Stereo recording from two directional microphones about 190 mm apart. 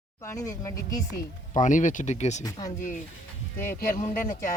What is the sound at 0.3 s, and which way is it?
Speech, 15° left (ahead or behind).